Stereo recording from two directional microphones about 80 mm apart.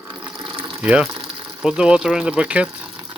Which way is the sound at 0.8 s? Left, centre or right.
Centre.